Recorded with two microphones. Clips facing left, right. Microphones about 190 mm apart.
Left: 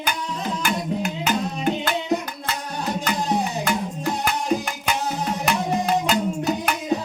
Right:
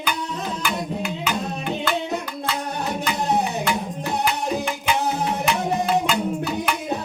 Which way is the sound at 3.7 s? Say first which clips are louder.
Left 1 dB; 45° left (ahead or behind).